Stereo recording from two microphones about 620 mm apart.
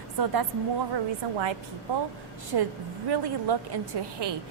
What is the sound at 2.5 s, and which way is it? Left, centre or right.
A woman's voice, right.